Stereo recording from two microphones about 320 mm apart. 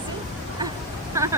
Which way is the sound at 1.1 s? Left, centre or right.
Centre.